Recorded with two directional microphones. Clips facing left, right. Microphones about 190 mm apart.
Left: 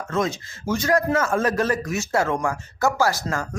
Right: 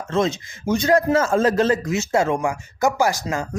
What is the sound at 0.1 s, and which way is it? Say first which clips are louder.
Speech: right 4 dB; 25° right (ahead or behind).